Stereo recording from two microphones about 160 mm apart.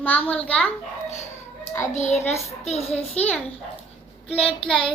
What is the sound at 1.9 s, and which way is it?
A child's voice, 45° left (ahead or behind).